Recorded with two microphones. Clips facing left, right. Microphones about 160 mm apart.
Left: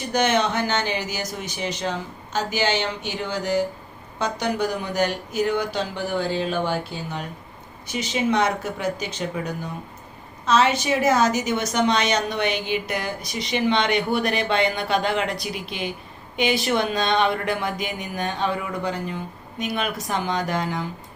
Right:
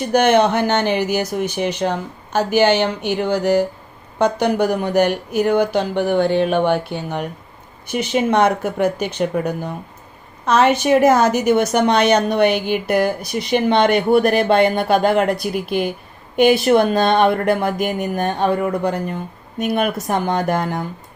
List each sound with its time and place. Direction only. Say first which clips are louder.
0.1 s speech: right 7 dB; 55° right (ahead or behind)